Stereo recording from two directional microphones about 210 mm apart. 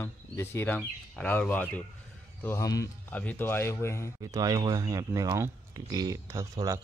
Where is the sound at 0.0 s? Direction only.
10° left (ahead or behind).